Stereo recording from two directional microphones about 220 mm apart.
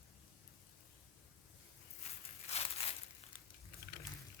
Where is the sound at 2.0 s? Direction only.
30° left (ahead or behind).